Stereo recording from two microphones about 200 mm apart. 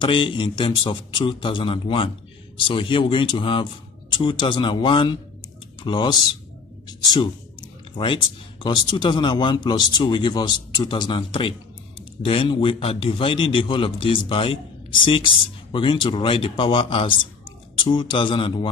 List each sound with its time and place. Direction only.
0.0 s speech: 25° left (ahead or behind)